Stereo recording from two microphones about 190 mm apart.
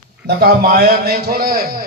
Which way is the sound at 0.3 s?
55° right (ahead or behind).